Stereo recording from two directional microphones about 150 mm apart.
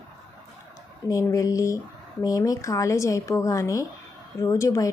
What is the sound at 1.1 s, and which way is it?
Speech, 20° left (ahead or behind).